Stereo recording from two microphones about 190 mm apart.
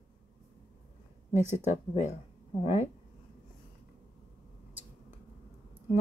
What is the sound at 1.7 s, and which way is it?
Speech, 35° left (ahead or behind).